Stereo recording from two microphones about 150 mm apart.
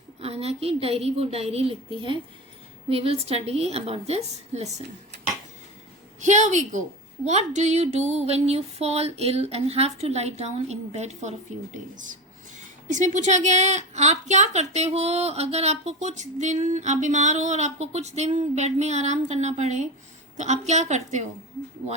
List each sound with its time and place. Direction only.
0.2 s a woman's voice: 40° right (ahead or behind)
6.1 s a woman's voice: 55° right (ahead or behind)
12.5 s a woman's voice: 55° right (ahead or behind)